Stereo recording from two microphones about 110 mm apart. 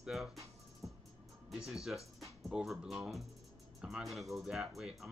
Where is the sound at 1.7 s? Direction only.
Centre (ahead or behind).